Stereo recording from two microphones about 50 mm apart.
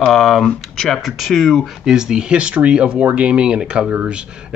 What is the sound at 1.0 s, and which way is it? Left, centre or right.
Speech, centre.